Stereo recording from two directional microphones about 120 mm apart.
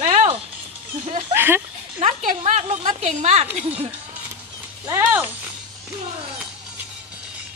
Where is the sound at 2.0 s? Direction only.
70° right (ahead or behind).